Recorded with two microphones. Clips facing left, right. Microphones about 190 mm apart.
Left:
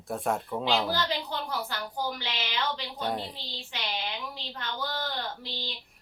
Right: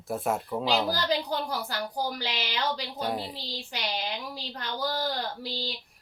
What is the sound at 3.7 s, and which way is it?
Speech, 40° right (ahead or behind).